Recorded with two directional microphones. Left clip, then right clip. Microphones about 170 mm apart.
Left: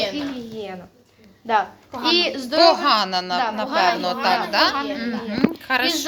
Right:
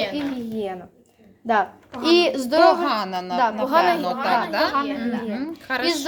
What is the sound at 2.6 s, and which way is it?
A woman's voice, 10° right (ahead or behind).